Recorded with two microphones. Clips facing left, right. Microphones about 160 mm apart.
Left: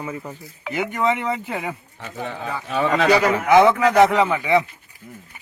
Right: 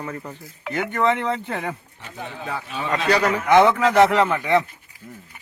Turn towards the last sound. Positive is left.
turn(degrees=0)  # may be behind; listen again after turning